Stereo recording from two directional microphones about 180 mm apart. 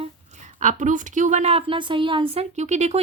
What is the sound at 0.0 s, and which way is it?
Speech, 40° right (ahead or behind).